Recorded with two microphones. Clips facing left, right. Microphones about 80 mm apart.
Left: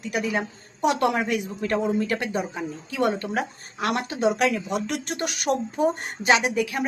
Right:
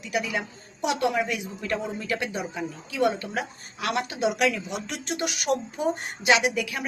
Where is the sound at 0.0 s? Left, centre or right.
Left.